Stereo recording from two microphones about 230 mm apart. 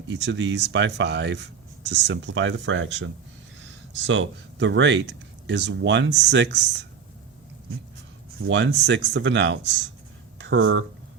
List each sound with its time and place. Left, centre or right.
0.1 s speech: right
8.4 s speech: right